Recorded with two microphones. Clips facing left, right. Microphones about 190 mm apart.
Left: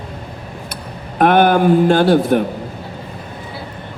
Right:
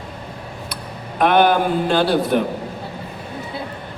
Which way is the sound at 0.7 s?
50° left (ahead or behind).